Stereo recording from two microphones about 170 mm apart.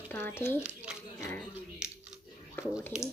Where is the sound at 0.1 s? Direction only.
10° left (ahead or behind).